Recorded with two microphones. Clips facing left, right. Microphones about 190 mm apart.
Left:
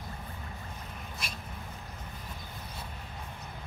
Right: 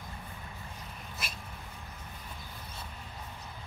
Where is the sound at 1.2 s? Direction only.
5° right (ahead or behind).